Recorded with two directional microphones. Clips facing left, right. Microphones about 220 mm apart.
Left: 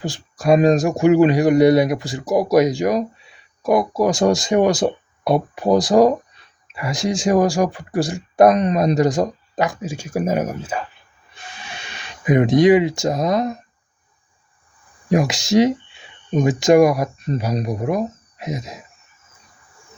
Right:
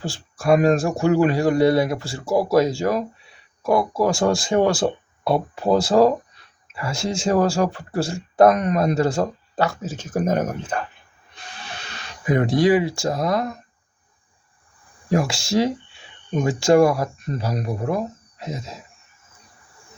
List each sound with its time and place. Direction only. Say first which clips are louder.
0.0 s speech: left 3 dB; 20° left (ahead or behind)
12.2 s speech: left 4 dB; 20° left (ahead or behind)
15.1 s speech: left 4 dB; 20° left (ahead or behind)